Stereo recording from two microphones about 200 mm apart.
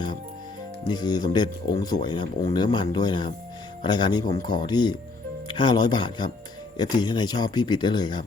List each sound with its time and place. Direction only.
0.9 s speech: 20° left (ahead or behind)